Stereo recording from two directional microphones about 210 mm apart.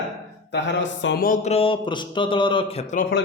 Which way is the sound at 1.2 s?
35° left (ahead or behind).